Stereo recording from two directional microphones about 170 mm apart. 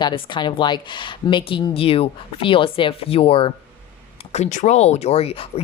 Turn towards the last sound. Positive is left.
turn(degrees=35)  # may be behind; listen again after turning